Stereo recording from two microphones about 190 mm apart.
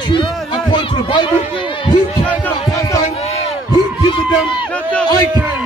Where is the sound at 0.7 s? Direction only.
25° left (ahead or behind).